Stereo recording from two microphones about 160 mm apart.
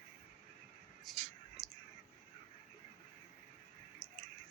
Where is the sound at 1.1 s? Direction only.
Centre (ahead or behind).